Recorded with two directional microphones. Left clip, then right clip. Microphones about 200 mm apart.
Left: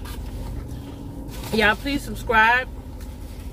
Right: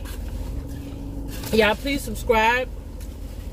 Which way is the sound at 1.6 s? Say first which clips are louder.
Even; 15° right (ahead or behind).